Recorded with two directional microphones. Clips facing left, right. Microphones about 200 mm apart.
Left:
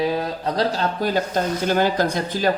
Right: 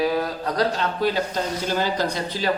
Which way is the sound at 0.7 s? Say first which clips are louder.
Left 1 dB; 45° left (ahead or behind).